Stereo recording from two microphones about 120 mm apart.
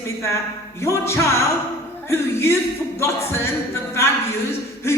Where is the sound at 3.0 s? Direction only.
20° left (ahead or behind).